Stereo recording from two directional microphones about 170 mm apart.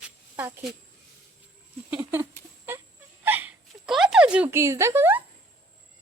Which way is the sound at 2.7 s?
15° right (ahead or behind).